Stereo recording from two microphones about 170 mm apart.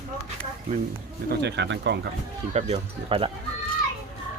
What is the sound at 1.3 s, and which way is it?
Speech, 85° right.